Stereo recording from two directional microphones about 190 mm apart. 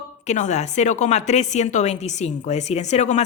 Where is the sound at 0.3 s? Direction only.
40° left (ahead or behind).